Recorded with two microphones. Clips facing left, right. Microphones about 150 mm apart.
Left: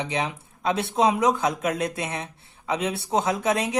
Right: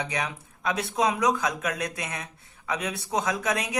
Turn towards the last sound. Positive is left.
turn(degrees=30)  # may be behind; listen again after turning